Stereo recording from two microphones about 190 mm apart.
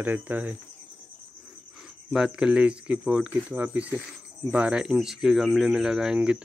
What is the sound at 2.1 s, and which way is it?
Speech, 5° right (ahead or behind).